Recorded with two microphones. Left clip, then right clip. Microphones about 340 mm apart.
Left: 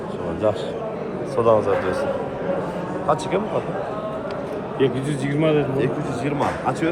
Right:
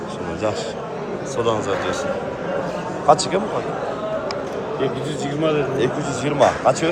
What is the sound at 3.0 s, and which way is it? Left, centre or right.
Speech, centre.